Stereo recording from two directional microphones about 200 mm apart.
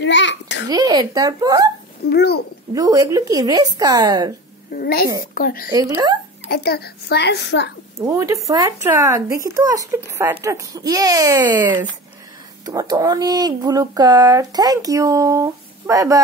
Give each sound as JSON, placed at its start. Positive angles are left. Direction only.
{"t": 0.0, "sound": "babbling", "side_deg": 65}
{"t": 0.7, "sound": "speech", "side_deg": -20}
{"t": 2.0, "sound": "a child's voice", "side_deg": 55}
{"t": 2.7, "sound": "speech", "side_deg": -15}
{"t": 4.7, "sound": "a child's voice", "side_deg": 50}
{"t": 5.7, "sound": "speech", "side_deg": -20}
{"t": 6.4, "sound": "a child's voice", "side_deg": 55}
{"t": 8.0, "sound": "speech", "side_deg": -15}